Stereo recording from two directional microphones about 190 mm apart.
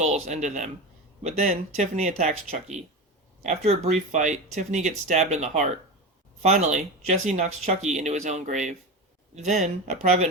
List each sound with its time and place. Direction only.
0.0 s speech: 35° right (ahead or behind)